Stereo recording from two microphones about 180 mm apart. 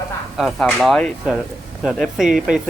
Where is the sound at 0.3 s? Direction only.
Centre (ahead or behind).